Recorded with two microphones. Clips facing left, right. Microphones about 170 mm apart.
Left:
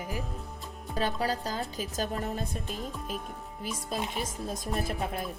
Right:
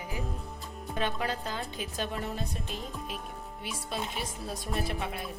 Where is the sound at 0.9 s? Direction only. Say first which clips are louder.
Left 2 dB; 35° left (ahead or behind).